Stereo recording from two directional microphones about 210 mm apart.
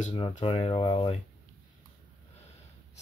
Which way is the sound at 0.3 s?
30° left (ahead or behind).